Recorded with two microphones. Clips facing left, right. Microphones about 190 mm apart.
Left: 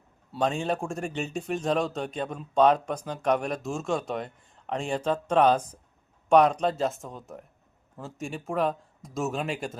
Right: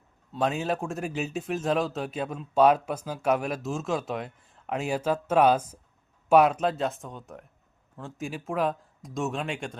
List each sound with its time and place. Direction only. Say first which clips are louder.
0.3 s a man's voice: even; centre (ahead or behind)